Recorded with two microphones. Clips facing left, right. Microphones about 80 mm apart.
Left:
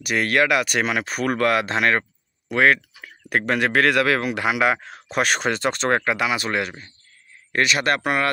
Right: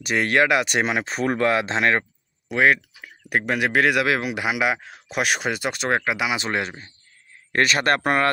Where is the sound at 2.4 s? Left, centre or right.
Centre.